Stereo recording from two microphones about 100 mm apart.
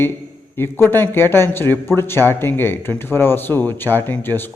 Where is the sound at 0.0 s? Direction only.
20° left (ahead or behind).